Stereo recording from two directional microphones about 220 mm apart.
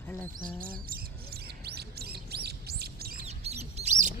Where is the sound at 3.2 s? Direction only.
30° right (ahead or behind).